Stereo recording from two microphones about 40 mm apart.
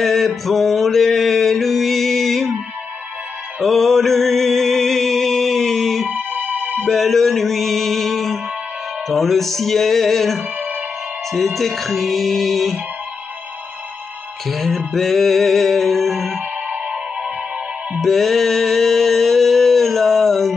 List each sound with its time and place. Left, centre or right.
0.0 s music: centre
3.6 s music: centre
6.0 s music: right
6.9 s music: centre
14.5 s music: centre
16.6 s music: right
18.0 s a sound: centre